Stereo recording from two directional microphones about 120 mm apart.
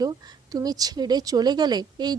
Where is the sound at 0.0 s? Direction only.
30° right (ahead or behind).